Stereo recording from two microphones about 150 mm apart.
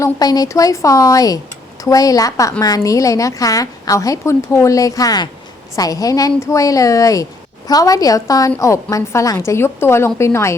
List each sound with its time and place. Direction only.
0.0 s a woman's voice: 25° left (ahead or behind)